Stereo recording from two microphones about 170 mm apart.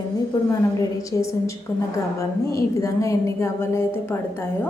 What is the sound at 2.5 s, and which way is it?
A woman's voice, 20° left (ahead or behind).